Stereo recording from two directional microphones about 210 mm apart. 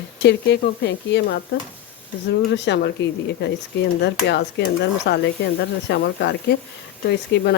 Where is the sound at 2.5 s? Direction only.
55° left (ahead or behind).